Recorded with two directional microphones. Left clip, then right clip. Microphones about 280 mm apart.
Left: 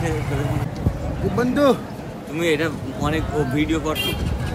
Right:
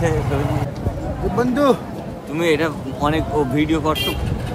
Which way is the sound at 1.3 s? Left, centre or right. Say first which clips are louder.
Right 1 dB; centre.